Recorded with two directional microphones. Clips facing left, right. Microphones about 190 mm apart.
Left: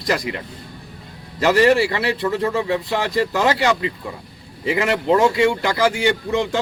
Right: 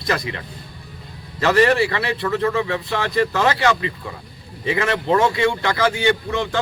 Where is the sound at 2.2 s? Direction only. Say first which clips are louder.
Right 1 dB; 15° left (ahead or behind).